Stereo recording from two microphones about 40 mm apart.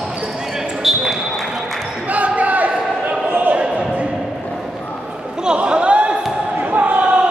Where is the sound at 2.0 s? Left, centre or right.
Right.